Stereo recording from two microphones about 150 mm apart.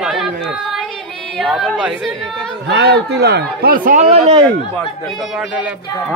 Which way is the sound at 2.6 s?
90° right.